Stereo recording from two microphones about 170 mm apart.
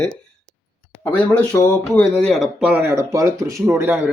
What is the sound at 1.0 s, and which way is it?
Speech, 10° left (ahead or behind).